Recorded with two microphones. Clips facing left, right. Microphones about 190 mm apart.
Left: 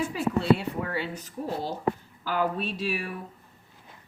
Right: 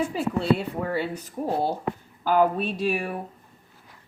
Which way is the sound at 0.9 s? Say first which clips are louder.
Right 4 dB; 50° right (ahead or behind).